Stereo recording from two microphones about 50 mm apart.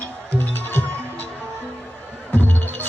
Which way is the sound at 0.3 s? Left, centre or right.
Left.